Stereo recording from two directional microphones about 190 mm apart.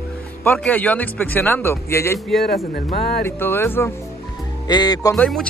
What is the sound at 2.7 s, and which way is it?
Speech, 55° left (ahead or behind).